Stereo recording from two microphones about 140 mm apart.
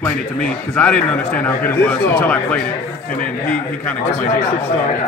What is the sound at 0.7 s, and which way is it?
A man's voice, 10° left (ahead or behind).